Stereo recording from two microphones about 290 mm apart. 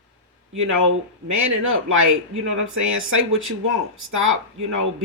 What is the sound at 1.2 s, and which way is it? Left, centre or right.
Speech, right.